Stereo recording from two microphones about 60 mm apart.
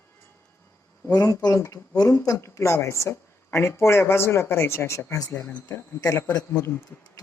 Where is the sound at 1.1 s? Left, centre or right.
Left.